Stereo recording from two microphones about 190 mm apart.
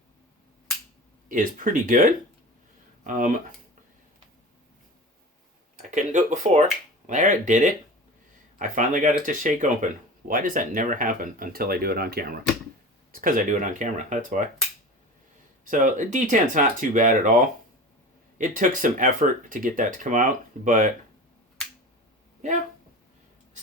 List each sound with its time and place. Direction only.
1.3 s speech: 45° right (ahead or behind)
5.7 s speech: 40° right (ahead or behind)
15.6 s speech: 45° right (ahead or behind)